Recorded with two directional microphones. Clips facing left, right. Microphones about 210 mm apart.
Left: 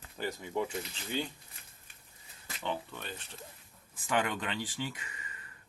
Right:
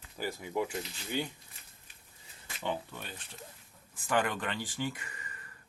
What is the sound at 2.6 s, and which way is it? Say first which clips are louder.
Speech: right 1 dB; 10° right (ahead or behind).